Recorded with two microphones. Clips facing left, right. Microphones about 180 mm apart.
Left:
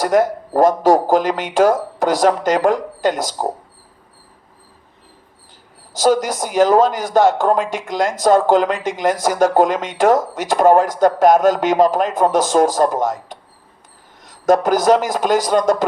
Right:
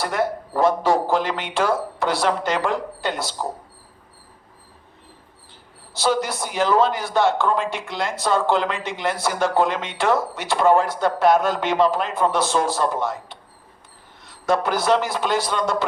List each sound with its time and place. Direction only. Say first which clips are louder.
0.0 s speech: left 8 dB; 45° left (ahead or behind)
5.9 s speech: left 6 dB; 45° left (ahead or behind)